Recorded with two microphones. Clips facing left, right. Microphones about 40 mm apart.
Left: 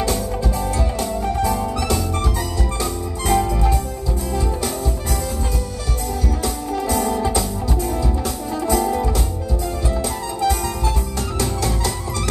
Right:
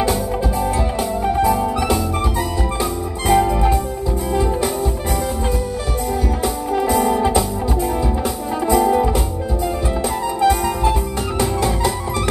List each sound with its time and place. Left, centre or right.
0.0 s music: centre
6.4 s music: centre
10.4 s music: centre